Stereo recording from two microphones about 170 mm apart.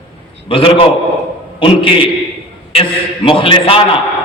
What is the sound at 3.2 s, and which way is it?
Speech, 30° left (ahead or behind).